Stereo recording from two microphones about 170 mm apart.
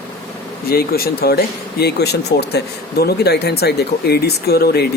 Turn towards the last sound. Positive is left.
turn(degrees=70)  # may be behind; listen again after turning